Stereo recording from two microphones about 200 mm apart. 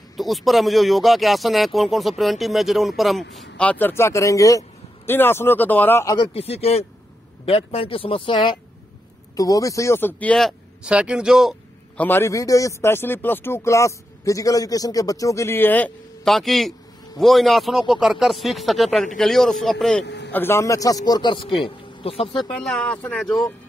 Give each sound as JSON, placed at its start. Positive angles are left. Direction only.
{"t": 0.2, "sound": "a man's voice", "side_deg": 0}
{"t": 12.0, "sound": "a man's voice", "side_deg": 10}
{"t": 22.4, "sound": "speech", "side_deg": 0}